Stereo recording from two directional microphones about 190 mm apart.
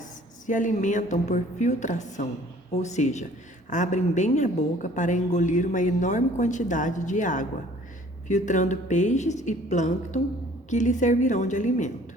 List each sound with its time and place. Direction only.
0.4 s a woman's voice: 40° left (ahead or behind)